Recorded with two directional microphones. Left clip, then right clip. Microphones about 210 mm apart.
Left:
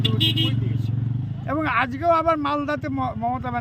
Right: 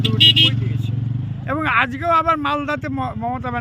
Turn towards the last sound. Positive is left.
turn(degrees=-5)  # may be behind; listen again after turning